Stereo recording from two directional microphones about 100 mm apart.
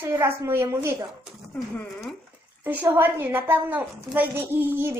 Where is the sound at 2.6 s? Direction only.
20° right (ahead or behind).